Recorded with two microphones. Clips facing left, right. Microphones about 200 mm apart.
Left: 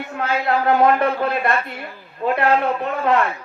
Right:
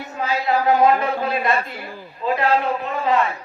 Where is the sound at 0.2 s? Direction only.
60° left (ahead or behind).